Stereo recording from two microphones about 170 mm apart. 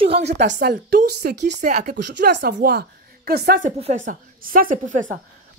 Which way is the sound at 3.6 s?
40° right (ahead or behind).